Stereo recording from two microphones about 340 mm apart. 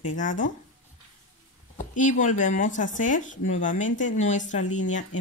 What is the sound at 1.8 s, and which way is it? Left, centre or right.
Speech, left.